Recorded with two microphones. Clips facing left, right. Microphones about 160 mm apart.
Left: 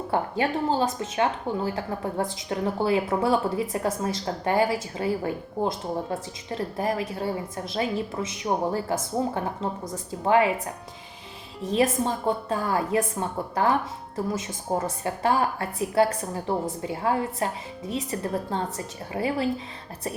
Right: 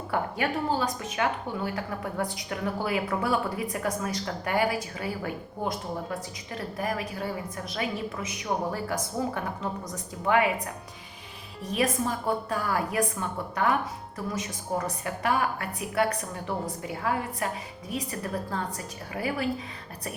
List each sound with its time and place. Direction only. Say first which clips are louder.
0.1 s speech: left 3 dB; 30° left (ahead or behind)
11.7 s speech: left 4 dB; 25° left (ahead or behind)